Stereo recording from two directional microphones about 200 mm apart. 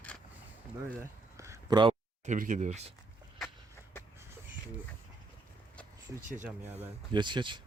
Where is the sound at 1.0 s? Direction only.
15° right (ahead or behind).